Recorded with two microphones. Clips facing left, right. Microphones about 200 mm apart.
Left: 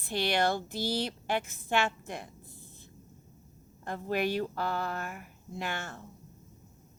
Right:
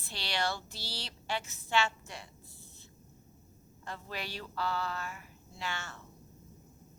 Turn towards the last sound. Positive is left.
turn(degrees=55)  # may be behind; listen again after turning